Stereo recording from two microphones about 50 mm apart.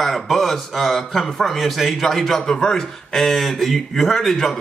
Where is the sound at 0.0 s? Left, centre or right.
Centre.